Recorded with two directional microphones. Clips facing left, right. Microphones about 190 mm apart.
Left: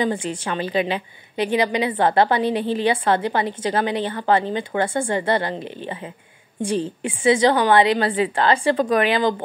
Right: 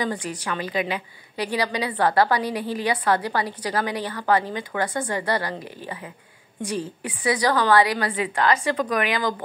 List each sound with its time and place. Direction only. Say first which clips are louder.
0.0 s a woman's voice: left 5 dB; 25° left (ahead or behind)